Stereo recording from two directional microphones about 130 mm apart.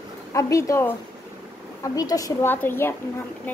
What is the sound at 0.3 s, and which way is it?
A woman's voice, 25° left (ahead or behind).